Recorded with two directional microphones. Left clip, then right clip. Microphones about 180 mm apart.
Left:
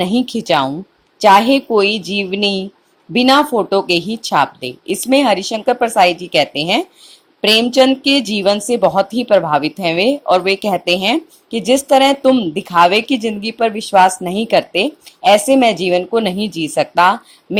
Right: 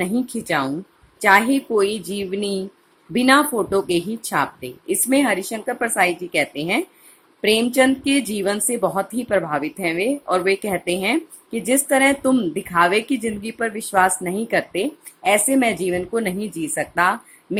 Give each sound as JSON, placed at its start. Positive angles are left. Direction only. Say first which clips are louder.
{"t": 0.0, "sound": "a woman's voice", "louder": "left 7 dB", "side_deg": 20}